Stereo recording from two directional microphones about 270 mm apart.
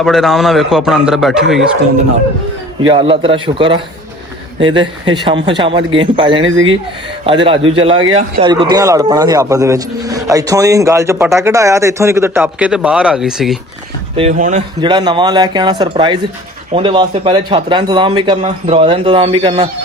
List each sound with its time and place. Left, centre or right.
0.0 s a man's voice: centre
2.8 s a man's voice: centre
7.4 s a man's voice: centre
14.2 s a man's voice: right
14.8 s a man's voice: centre